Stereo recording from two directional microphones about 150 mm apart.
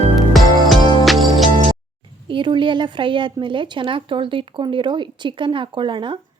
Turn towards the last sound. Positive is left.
turn(degrees=-35)  # may be behind; listen again after turning